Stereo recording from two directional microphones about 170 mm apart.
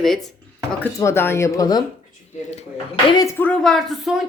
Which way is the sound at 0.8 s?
15° left (ahead or behind).